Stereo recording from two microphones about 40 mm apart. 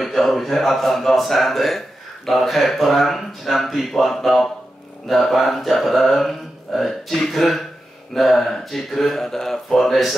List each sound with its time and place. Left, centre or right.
0.0 s speech: centre